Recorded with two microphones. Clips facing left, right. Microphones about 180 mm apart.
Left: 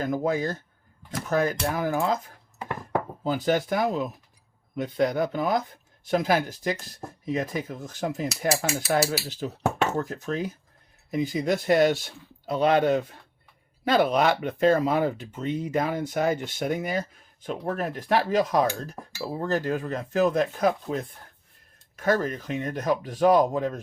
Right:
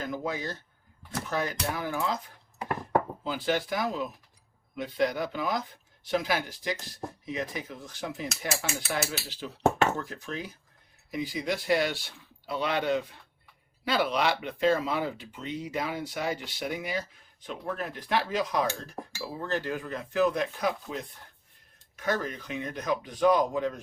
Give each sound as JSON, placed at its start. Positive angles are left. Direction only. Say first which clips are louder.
{"t": 0.2, "sound": "speech", "louder": "left 7 dB", "side_deg": 50}